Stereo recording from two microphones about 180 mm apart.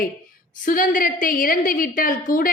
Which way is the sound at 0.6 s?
50° left (ahead or behind).